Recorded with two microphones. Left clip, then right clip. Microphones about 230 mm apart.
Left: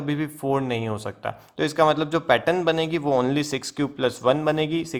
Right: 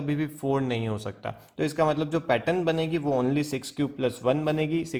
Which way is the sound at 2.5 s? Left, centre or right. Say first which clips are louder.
Left 4 dB; left.